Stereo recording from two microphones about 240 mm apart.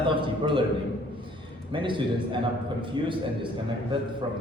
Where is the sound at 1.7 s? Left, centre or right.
Centre.